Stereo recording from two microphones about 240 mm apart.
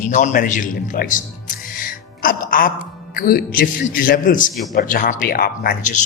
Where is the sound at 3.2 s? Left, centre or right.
Left.